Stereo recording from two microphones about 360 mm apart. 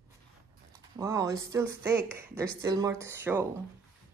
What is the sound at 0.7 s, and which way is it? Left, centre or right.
Speech, centre.